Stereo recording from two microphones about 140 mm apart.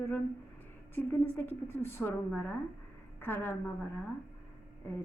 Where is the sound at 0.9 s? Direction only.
15° left (ahead or behind).